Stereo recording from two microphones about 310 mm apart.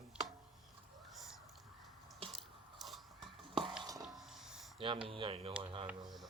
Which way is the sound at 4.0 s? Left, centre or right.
Centre.